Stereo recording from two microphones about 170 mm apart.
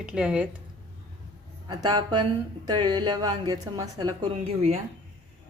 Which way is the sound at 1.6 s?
25° right (ahead or behind).